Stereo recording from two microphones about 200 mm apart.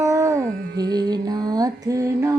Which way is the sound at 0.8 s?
20° right (ahead or behind).